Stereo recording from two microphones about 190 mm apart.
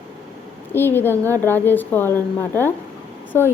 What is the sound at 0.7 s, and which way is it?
A woman's voice, 10° left (ahead or behind).